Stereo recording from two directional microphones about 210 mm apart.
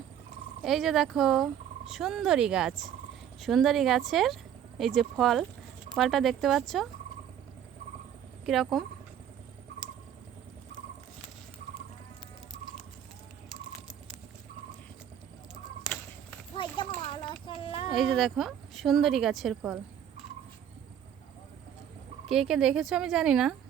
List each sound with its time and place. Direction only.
0.6 s a woman's voice: centre (ahead or behind)
8.4 s a woman's voice: centre (ahead or behind)
17.1 s child singing: 25° left (ahead or behind)
17.9 s a woman's voice: centre (ahead or behind)
22.3 s a woman's voice: centre (ahead or behind)